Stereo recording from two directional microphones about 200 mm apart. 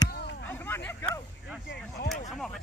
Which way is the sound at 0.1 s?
60° left (ahead or behind).